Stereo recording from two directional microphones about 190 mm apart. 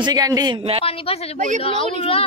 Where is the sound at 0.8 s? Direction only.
30° left (ahead or behind).